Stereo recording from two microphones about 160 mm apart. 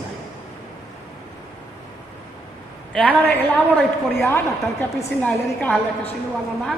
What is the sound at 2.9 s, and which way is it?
A woman's voice, 10° left (ahead or behind).